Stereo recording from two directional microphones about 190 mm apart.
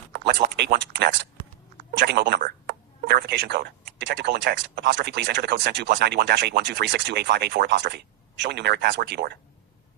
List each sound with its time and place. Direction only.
0.1 s speech: 55° right (ahead or behind)